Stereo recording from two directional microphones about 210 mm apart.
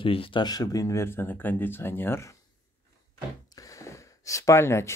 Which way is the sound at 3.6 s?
15° left (ahead or behind).